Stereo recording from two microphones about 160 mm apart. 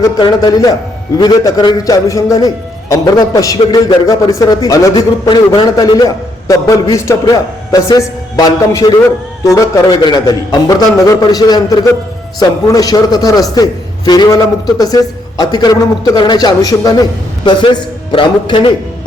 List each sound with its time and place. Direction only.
0.0 s a man's voice: 25° left (ahead or behind)